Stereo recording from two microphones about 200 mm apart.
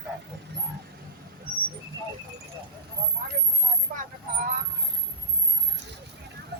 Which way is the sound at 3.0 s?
50° right (ahead or behind).